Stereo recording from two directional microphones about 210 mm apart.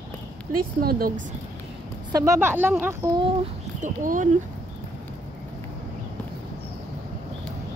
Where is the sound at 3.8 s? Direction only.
40° right (ahead or behind).